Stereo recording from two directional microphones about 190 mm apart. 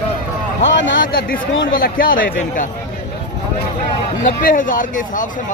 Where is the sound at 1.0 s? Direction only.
50° left (ahead or behind).